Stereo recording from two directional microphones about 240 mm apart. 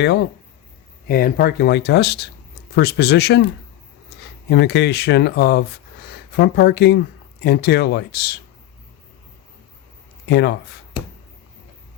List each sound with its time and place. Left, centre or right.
0.0 s speech: left
4.4 s speech: left
10.2 s speech: left